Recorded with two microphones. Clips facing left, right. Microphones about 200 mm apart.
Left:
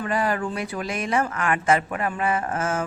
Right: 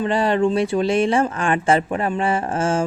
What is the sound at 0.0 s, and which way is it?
Speech, 25° right (ahead or behind).